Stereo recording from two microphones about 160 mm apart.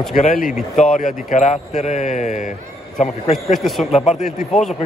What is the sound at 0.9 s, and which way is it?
A man's voice, 55° left (ahead or behind).